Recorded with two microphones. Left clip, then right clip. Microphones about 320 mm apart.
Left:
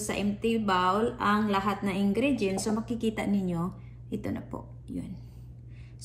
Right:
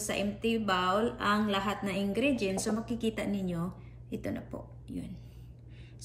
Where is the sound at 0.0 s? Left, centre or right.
Centre.